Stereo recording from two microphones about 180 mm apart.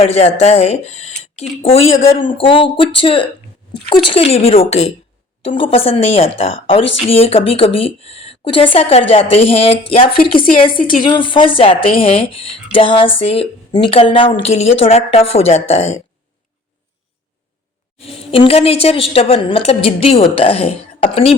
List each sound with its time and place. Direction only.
0.0 s a woman's voice: 35° left (ahead or behind)
10.7 s a woman's voice: 50° left (ahead or behind)
11.0 s a woman's voice: 25° left (ahead or behind)
17.9 s a woman's voice: 30° left (ahead or behind)